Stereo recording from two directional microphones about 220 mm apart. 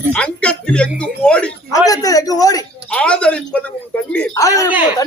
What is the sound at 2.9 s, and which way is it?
A man's voice, 5° left (ahead or behind).